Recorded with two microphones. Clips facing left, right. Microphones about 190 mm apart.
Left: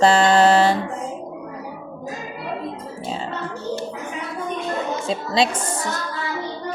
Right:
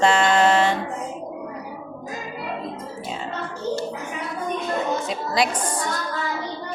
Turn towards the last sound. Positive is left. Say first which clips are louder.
# even
turn(degrees=25)  # may be behind; listen again after turning